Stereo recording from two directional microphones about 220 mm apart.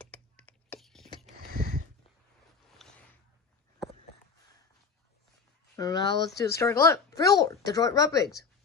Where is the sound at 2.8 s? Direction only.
Centre (ahead or behind).